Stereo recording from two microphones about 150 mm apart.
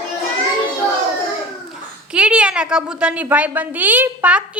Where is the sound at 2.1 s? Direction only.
10° right (ahead or behind).